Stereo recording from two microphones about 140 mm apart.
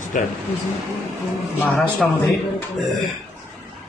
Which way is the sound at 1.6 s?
5° left (ahead or behind).